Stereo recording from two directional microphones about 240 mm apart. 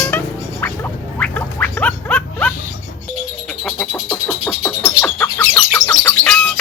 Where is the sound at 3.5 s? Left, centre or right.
Centre.